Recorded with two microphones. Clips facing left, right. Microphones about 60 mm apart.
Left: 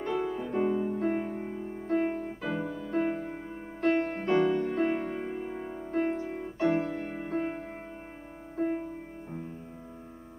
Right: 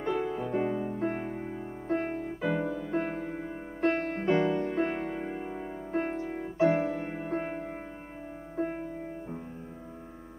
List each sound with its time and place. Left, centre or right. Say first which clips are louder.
0.0 s music: right 1 dB; centre